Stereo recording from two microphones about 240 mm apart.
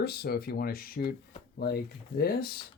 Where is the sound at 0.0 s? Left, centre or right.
Left.